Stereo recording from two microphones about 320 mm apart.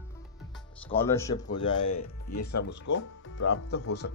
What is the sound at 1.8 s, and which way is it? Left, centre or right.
Speech, left.